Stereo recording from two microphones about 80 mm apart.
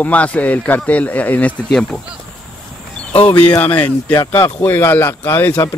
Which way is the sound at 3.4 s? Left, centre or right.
Centre.